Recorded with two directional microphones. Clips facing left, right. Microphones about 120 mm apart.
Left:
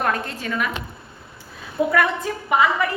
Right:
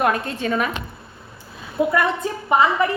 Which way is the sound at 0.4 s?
30° right (ahead or behind).